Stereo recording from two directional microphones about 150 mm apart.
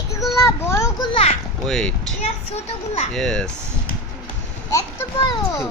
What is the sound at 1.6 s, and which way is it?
Speech, 5° left (ahead or behind).